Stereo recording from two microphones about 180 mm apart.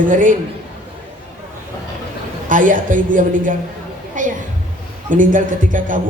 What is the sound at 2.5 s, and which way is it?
A woman's voice, 45° right (ahead or behind).